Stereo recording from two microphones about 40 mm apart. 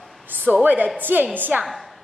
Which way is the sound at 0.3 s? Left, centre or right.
Right.